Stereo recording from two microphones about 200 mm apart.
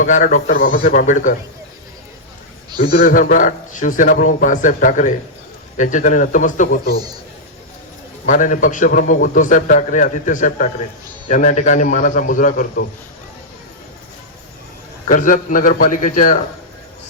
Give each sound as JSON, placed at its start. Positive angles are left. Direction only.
{"t": 0.0, "sound": "a man's voice", "side_deg": 40}
{"t": 2.6, "sound": "a sound", "side_deg": -20}
{"t": 2.9, "sound": "a man's voice", "side_deg": 45}
{"t": 8.3, "sound": "a man's voice", "side_deg": 40}
{"t": 15.0, "sound": "a man's voice", "side_deg": 40}